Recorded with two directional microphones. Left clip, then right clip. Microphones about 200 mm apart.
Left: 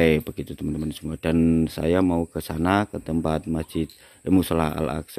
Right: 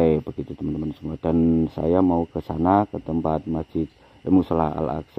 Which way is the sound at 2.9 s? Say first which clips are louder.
Right 1 dB; 25° left (ahead or behind).